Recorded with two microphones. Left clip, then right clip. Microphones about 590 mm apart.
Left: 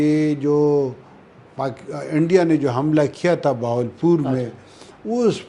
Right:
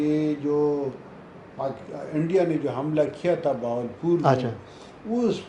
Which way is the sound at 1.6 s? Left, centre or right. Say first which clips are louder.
Left 5 dB; left.